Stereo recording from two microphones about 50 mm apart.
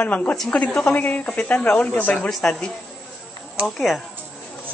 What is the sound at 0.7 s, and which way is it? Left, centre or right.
Speech, centre.